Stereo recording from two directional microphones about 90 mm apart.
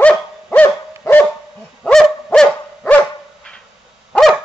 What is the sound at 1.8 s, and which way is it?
Owl, 5° left (ahead or behind).